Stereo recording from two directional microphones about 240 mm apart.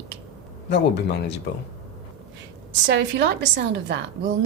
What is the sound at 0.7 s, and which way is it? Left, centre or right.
Speech, left.